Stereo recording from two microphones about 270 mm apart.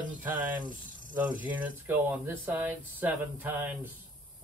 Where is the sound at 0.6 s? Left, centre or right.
Right.